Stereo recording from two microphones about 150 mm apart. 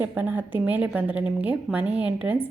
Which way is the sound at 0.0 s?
15° right (ahead or behind).